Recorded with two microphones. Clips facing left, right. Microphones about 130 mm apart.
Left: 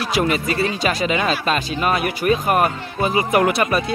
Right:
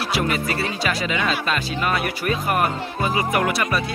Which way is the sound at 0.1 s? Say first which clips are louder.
Left 4 dB; 20° left (ahead or behind).